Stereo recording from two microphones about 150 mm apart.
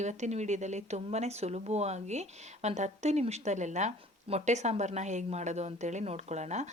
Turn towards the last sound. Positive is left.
turn(degrees=-50)  # may be behind; listen again after turning